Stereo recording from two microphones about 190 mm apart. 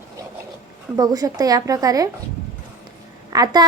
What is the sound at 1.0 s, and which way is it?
A woman's voice, 20° right (ahead or behind).